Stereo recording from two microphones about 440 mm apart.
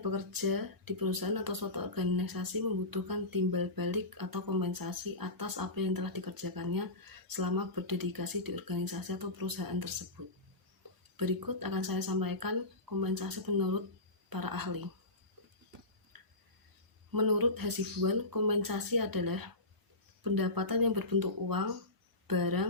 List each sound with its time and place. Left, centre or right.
0.0 s speech: right
17.1 s speech: right